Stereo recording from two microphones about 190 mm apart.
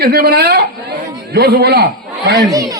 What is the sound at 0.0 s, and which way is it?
Speech, 55° right (ahead or behind).